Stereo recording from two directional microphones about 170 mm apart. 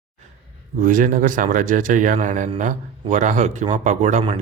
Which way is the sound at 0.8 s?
50° right (ahead or behind).